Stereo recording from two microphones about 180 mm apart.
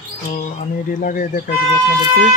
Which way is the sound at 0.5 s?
50° left (ahead or behind).